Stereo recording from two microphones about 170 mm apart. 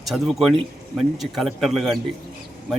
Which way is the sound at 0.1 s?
Centre (ahead or behind).